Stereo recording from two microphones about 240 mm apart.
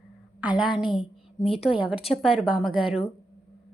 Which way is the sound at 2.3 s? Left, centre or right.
Centre.